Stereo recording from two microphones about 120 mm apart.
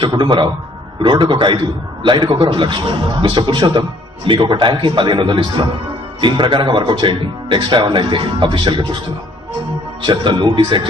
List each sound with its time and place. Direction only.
0.0 s a man's voice: 40° right (ahead or behind)
10.0 s a man's voice: 40° right (ahead or behind)